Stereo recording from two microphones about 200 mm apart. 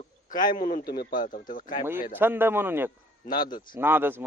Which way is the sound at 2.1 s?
10° right (ahead or behind).